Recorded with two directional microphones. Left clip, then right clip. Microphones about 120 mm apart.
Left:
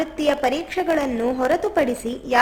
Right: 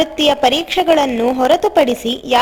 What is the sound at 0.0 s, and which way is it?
A woman's voice, 30° right (ahead or behind).